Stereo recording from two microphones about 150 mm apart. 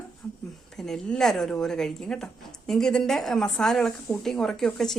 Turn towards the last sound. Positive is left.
turn(degrees=5)  # may be behind; listen again after turning